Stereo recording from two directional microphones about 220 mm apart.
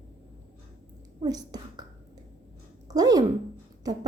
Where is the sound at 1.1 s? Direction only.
15° right (ahead or behind).